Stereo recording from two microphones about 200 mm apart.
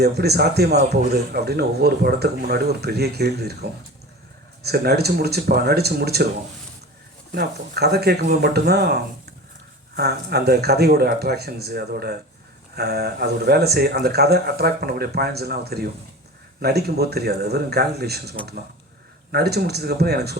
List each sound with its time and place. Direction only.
0.0 s speech: 55° right (ahead or behind)
7.3 s speech: 50° right (ahead or behind)